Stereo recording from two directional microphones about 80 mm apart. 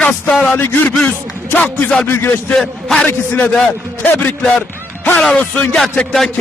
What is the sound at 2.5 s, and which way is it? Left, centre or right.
Speech, centre.